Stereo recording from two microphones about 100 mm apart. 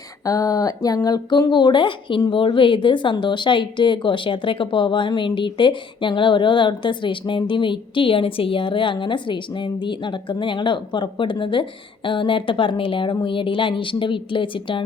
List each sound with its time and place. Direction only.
0.3 s speech: 35° left (ahead or behind); by 14.8 s 60° left (ahead or behind)